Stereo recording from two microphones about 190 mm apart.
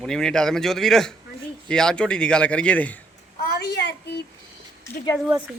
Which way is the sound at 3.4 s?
50° left (ahead or behind).